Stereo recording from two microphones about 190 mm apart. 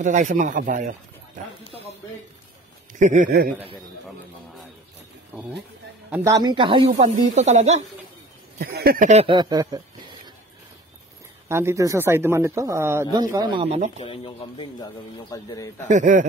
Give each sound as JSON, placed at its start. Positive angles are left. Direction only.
{"t": 0.0, "sound": "speech", "side_deg": -40}
{"t": 2.9, "sound": "speech", "side_deg": -40}
{"t": 5.3, "sound": "speech", "side_deg": -5}
{"t": 6.3, "sound": "speech", "side_deg": -25}
{"t": 7.0, "sound": "speech", "side_deg": -35}
{"t": 8.5, "sound": "speech", "side_deg": -55}
{"t": 9.2, "sound": "speech", "side_deg": -25}
{"t": 11.4, "sound": "speech", "side_deg": -15}
{"t": 14.0, "sound": "a man's voice", "side_deg": 30}
{"t": 15.9, "sound": "speech", "side_deg": -40}